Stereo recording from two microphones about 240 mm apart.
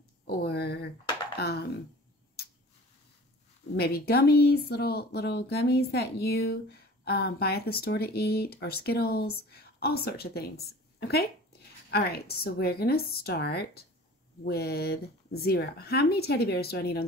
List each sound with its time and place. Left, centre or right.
0.3 s speech: left
3.7 s speech: left
10.7 s a sound: left
11.9 s speech: left